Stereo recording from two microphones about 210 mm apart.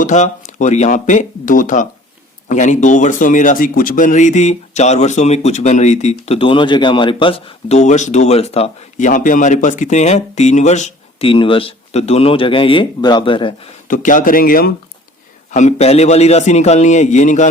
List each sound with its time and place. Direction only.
0.0 s speech: 35° left (ahead or behind)
13.8 s speech: 40° left (ahead or behind)
15.5 s speech: 35° left (ahead or behind)